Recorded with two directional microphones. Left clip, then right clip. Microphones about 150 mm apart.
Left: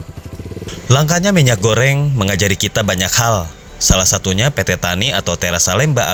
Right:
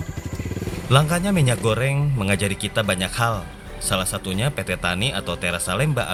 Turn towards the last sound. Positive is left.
turn(degrees=40)  # may be behind; listen again after turning